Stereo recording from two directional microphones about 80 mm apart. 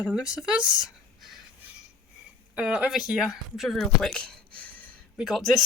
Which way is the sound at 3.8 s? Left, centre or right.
Centre.